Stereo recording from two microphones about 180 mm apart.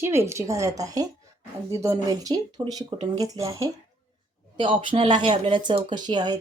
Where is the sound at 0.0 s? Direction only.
15° right (ahead or behind).